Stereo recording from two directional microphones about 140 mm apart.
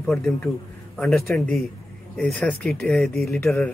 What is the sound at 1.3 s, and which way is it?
Speech, centre (ahead or behind).